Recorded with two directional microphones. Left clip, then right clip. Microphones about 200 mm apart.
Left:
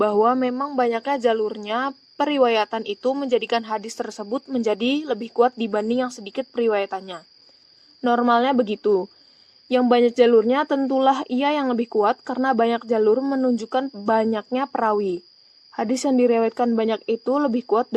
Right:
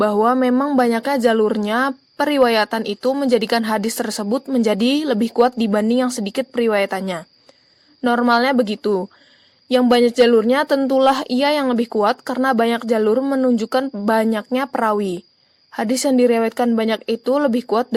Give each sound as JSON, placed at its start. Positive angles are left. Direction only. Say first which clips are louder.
{"t": 0.0, "sound": "a woman's voice", "louder": "right 3 dB", "side_deg": -40}